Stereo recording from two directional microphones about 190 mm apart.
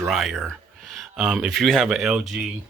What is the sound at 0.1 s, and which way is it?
Speech, centre (ahead or behind).